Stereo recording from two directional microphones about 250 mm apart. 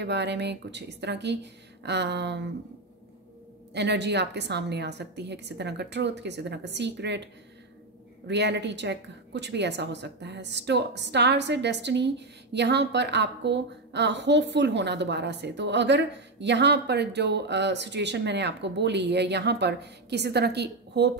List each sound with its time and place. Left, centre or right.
0.0 s a woman's voice: right
3.7 s a woman's voice: right
8.3 s a woman's voice: right